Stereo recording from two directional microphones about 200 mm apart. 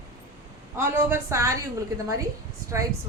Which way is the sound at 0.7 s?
10° right (ahead or behind).